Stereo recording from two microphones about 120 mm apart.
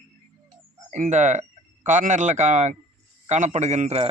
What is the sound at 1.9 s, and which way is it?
Speech, 90° right.